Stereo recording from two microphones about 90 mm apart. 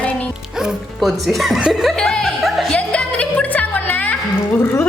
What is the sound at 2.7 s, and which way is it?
Music, 10° left (ahead or behind).